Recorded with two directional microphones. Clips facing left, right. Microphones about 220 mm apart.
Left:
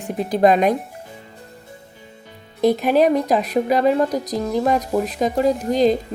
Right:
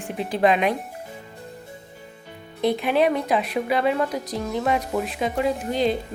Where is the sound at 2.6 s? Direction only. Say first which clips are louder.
Left 5 dB; 40° left (ahead or behind).